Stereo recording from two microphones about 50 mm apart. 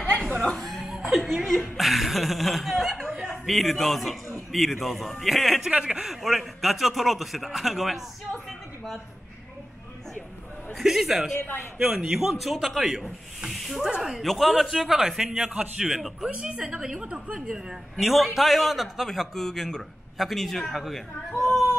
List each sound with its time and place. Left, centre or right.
0.0 s chuckle: centre
0.7 s music: centre
0.9 s a man's voice: centre
5.7 s a man's voice: centre
6.0 s a man's voice: centre
8.5 s a sound: centre
10.7 s a man's voice: centre
11.8 s a man's voice: centre
13.5 s a sound: centre
13.7 s a man's voice: centre
14.2 s a man's voice: centre
16.3 s a woman's voice: right
17.9 s a man's voice: centre